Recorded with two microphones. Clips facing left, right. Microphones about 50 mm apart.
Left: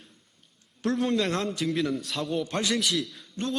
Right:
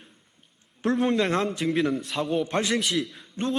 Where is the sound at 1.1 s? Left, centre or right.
Right.